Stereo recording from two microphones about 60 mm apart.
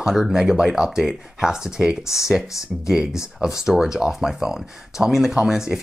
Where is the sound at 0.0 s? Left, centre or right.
Centre.